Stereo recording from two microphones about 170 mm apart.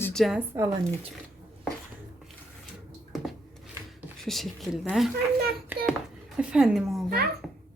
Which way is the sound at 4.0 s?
Centre (ahead or behind).